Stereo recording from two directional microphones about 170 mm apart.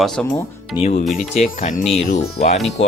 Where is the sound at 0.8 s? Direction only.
40° left (ahead or behind).